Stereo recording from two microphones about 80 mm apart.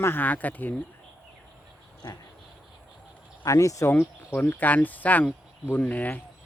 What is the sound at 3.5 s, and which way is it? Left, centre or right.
Speech, left.